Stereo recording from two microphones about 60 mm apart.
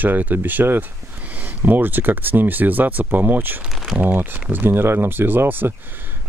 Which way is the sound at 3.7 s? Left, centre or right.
Centre.